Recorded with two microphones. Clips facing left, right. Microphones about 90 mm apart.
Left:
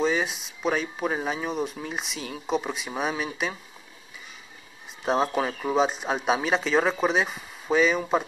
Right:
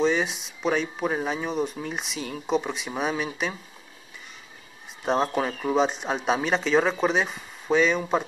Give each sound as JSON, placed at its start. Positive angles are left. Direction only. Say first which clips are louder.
{"t": 0.0, "sound": "speech", "louder": "right 2 dB", "side_deg": 0}
{"t": 5.0, "sound": "speech", "louder": "even", "side_deg": 0}